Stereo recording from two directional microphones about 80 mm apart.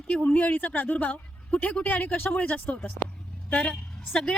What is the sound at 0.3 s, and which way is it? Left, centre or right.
A woman's voice, left.